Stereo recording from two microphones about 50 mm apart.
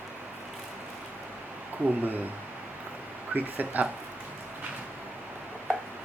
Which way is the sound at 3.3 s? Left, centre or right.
Right.